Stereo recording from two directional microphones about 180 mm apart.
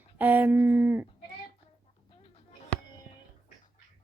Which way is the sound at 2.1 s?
30° left (ahead or behind).